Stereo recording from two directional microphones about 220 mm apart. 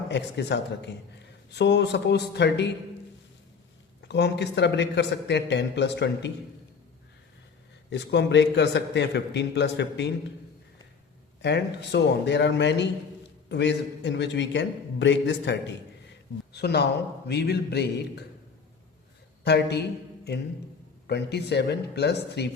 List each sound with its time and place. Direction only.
0.1 s a man's voice: 50° left (ahead or behind)
4.1 s a man's voice: 50° left (ahead or behind)
7.9 s a man's voice: 50° left (ahead or behind)
11.4 s a man's voice: 50° left (ahead or behind)
19.5 s a man's voice: 50° left (ahead or behind)
21.1 s a man's voice: 50° left (ahead or behind)